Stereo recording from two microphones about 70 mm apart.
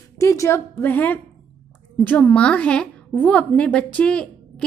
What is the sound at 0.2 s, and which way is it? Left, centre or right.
A woman's voice, left.